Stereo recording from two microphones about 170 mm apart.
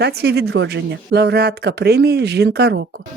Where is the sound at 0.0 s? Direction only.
75° right (ahead or behind).